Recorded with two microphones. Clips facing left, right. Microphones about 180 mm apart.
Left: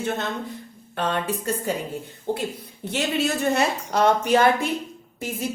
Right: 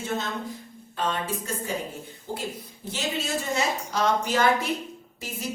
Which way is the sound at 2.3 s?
65° left (ahead or behind).